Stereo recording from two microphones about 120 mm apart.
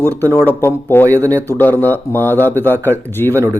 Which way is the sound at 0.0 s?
15° left (ahead or behind).